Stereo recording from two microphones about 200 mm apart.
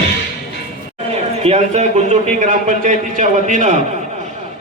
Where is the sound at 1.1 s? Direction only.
30° right (ahead or behind).